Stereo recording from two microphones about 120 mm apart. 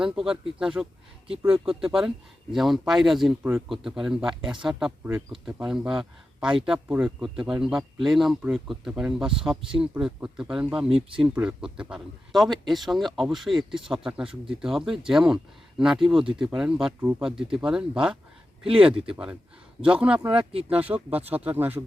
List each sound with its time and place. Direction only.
0.0 s speech: 5° right (ahead or behind)
20.5 s speech: 55° right (ahead or behind)
20.7 s speech: 15° right (ahead or behind)